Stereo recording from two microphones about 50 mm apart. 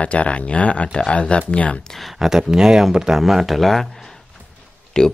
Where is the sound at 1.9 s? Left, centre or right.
Centre.